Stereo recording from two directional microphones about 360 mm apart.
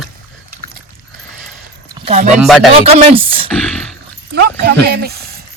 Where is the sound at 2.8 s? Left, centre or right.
Centre.